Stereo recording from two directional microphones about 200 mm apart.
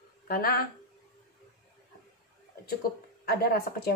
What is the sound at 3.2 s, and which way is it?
Speech, 50° left (ahead or behind).